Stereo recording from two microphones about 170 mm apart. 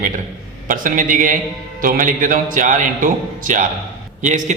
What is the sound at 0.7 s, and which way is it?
A man's voice, 50° right (ahead or behind).